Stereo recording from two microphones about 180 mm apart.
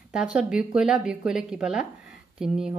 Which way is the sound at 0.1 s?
5° right (ahead or behind).